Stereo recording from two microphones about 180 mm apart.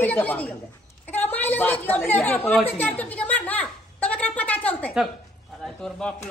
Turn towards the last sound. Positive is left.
turn(degrees=5)  # may be behind; listen again after turning